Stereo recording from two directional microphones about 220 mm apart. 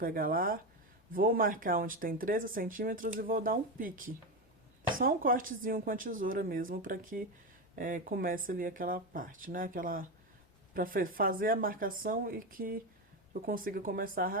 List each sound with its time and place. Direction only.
0.0 s speech: 40° right (ahead or behind)